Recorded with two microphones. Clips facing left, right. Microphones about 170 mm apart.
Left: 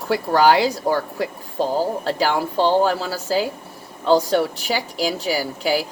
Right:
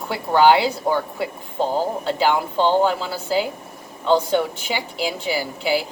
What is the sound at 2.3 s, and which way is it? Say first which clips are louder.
A woman's voice: left 3 dB; 35° left (ahead or behind).